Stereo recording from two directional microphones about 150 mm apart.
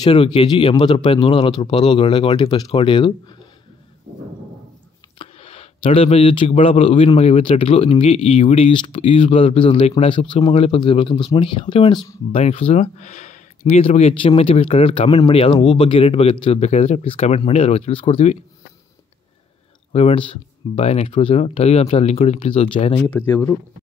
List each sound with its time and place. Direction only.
0.0 s speech: 40° left (ahead or behind)
5.2 s a sound: 40° left (ahead or behind)
6.6 s speech: 40° left (ahead or behind)
8.6 s speech: 35° left (ahead or behind)
19.9 s speech: 45° left (ahead or behind)
23.0 s speech: 15° left (ahead or behind)